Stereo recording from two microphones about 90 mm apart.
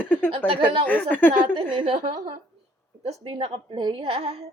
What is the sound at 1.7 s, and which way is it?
Speech, 90° right.